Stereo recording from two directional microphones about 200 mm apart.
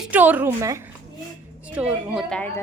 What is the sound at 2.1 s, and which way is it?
Speech, 5° left (ahead or behind).